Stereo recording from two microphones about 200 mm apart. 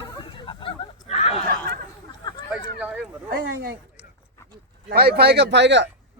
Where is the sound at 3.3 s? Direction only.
50° right (ahead or behind).